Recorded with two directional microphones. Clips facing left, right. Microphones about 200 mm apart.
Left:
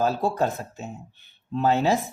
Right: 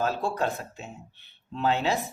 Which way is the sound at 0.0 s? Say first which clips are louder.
Left 4 dB; 40° left (ahead or behind).